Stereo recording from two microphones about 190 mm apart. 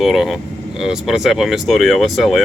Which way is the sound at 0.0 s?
Centre (ahead or behind).